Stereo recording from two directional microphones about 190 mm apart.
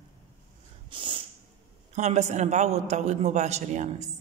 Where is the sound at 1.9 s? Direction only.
35° right (ahead or behind).